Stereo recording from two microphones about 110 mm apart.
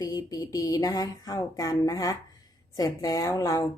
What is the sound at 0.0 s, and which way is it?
Speech, 35° left (ahead or behind).